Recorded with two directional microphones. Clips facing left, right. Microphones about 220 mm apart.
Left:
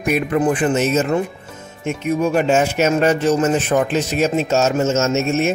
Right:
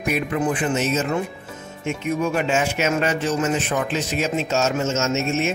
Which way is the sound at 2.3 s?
40° left (ahead or behind).